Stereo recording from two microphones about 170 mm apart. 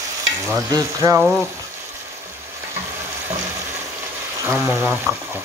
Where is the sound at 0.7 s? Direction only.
20° right (ahead or behind).